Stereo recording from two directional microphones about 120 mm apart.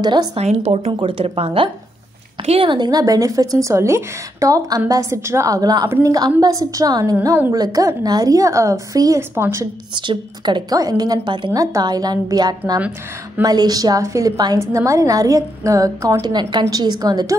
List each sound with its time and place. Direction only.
0.0 s a woman's voice: 35° right (ahead or behind)
0.4 s speech: 65° right (ahead or behind)
0.9 s speech: 50° right (ahead or behind)
2.7 s a woman's voice: 35° right (ahead or behind); by 9.7 s 20° right (ahead or behind)
9.9 s a woman's voice: 40° right (ahead or behind)
11.5 s a woman's voice: 30° right (ahead or behind)